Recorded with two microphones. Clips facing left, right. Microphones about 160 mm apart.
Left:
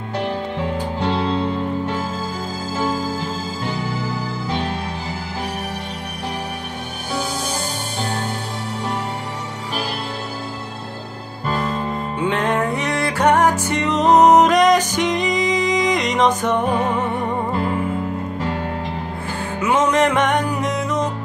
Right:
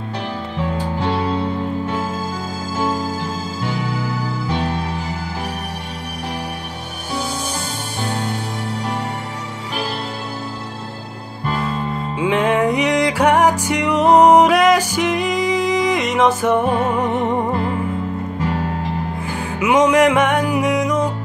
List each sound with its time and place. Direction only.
12.2 s music: 10° right (ahead or behind)
17.1 s music: 20° right (ahead or behind)
19.6 s music: 10° right (ahead or behind)